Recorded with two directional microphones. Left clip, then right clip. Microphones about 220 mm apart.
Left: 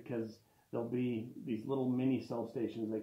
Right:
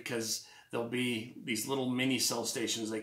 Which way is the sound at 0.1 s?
25° right (ahead or behind).